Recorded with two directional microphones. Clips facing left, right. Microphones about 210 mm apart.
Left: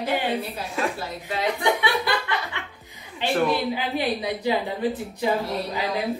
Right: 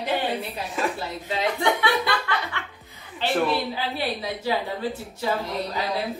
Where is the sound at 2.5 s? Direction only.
15° left (ahead or behind).